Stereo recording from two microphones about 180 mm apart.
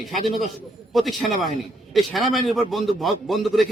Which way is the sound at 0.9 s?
Centre (ahead or behind).